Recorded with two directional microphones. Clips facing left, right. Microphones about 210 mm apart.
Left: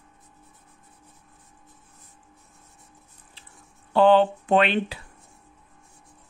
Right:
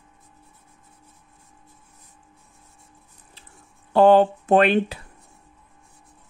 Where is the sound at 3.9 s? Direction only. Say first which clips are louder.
Right 3 dB; 45° right (ahead or behind).